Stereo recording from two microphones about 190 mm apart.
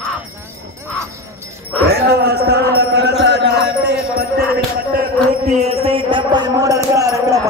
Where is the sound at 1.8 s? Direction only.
60° right (ahead or behind).